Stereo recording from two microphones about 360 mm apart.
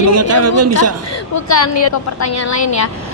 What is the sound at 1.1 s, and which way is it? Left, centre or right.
A woman's voice, left.